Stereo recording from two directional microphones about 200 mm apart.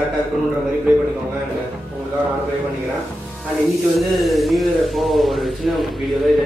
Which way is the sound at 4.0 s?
Centre (ahead or behind).